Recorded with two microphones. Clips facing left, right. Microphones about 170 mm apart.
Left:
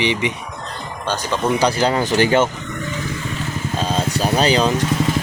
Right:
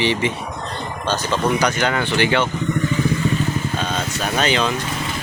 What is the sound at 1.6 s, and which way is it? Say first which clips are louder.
Speech: left 3 dB; 35° left (ahead or behind).